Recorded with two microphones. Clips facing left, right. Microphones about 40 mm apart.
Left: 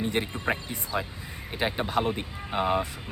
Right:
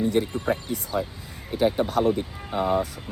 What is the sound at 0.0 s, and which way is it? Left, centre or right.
Speech, left.